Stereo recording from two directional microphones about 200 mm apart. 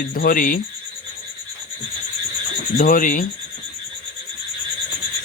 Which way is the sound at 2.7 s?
40° left (ahead or behind).